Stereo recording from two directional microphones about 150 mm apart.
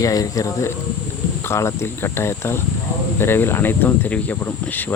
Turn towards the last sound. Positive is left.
turn(degrees=10)  # may be behind; listen again after turning